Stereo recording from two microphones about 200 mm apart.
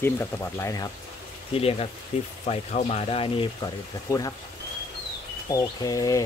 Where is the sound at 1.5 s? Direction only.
30° left (ahead or behind).